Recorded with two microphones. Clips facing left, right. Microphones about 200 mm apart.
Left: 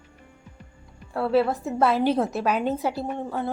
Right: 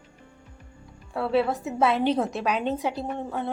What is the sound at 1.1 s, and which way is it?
A woman's voice, centre (ahead or behind).